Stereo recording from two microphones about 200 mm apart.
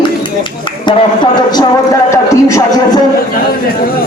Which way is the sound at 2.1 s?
15° left (ahead or behind).